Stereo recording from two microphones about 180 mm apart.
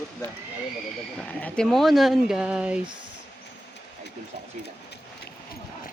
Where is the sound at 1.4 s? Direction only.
5° left (ahead or behind).